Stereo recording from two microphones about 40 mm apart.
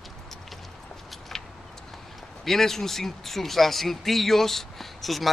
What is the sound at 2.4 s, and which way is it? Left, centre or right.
Speech, centre.